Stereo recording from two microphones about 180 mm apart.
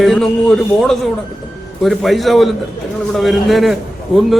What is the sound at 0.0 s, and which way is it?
A man's voice, centre (ahead or behind).